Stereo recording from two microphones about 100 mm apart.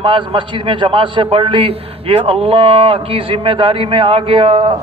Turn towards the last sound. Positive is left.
turn(degrees=-65)  # may be behind; listen again after turning